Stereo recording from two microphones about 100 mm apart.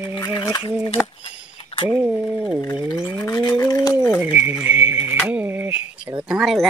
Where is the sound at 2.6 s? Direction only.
30° left (ahead or behind).